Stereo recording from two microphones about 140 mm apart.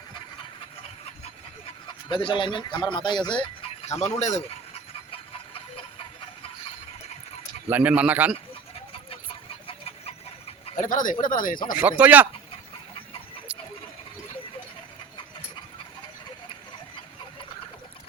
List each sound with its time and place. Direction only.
2.0 s speech: 35° left (ahead or behind)
3.8 s speech: 50° left (ahead or behind)
7.7 s speech: 10° right (ahead or behind)
9.6 s chicken: 45° left (ahead or behind)
10.8 s speech: 70° left (ahead or behind)
11.8 s speech: 10° right (ahead or behind)